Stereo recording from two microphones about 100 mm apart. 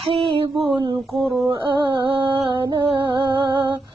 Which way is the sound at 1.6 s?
55° right (ahead or behind).